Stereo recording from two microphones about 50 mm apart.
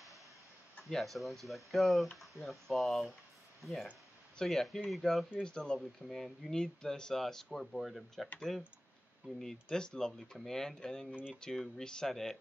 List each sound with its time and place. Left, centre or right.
0.8 s speech: centre
4.4 s speech: centre
5.4 s speech: centre
6.0 s speech: centre
8.4 s speech: centre